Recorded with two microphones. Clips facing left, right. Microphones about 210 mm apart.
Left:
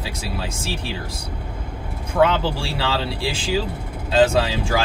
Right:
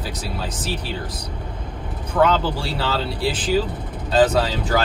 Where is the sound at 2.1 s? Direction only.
10° left (ahead or behind).